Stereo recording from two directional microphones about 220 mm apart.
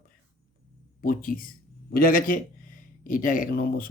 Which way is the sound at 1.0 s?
40° left (ahead or behind).